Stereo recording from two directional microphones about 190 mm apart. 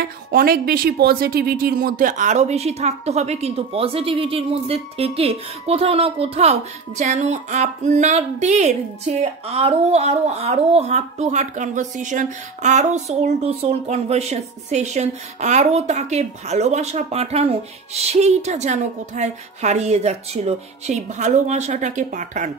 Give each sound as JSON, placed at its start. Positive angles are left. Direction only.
{"t": 0.0, "sound": "speech", "side_deg": -50}